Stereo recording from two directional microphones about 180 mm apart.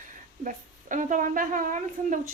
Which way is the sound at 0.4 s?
45° right (ahead or behind).